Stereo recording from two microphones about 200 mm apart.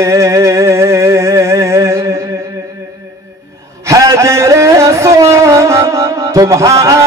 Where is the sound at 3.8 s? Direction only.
15° right (ahead or behind).